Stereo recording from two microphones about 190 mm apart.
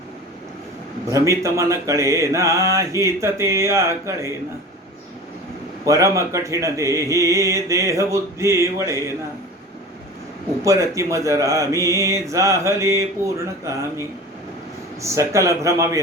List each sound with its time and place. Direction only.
1.1 s speech: 15° right (ahead or behind)
5.8 s speech: 15° right (ahead or behind)
10.6 s speech: 15° right (ahead or behind)
15.0 s speech: 15° right (ahead or behind)